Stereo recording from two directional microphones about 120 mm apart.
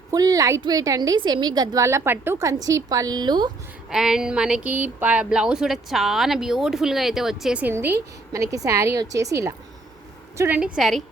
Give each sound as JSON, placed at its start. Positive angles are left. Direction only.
{"t": 0.1, "sound": "a woman's voice", "side_deg": -30}
{"t": 3.8, "sound": "speech", "side_deg": -5}
{"t": 7.7, "sound": "a woman's voice", "side_deg": -20}
{"t": 10.6, "sound": "speech", "side_deg": 0}